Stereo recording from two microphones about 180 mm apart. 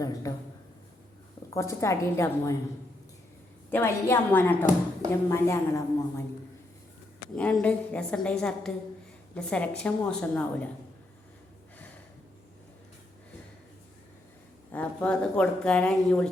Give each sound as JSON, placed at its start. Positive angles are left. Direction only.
{"t": 0.0, "sound": "a man's voice", "side_deg": 20}
{"t": 1.5, "sound": "a woman's voice", "side_deg": 15}
{"t": 3.7, "sound": "a woman's voice", "side_deg": 15}
{"t": 7.3, "sound": "a woman's voice", "side_deg": 5}
{"t": 14.7, "sound": "speech", "side_deg": 5}